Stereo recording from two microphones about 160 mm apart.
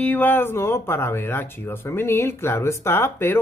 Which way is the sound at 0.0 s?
10° left (ahead or behind).